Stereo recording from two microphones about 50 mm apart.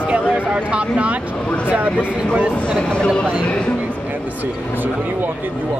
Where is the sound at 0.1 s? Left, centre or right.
Right.